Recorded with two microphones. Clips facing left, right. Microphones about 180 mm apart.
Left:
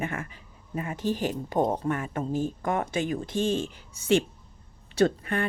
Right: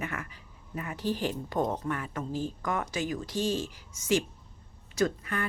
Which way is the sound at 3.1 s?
55° left (ahead or behind).